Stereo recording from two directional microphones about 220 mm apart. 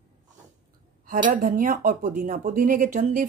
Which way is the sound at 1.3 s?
35° right (ahead or behind).